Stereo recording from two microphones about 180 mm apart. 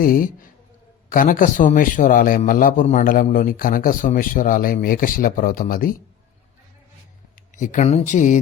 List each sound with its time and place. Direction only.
0.0 s a man's voice: 50° left (ahead or behind)
7.3 s speech: 45° left (ahead or behind)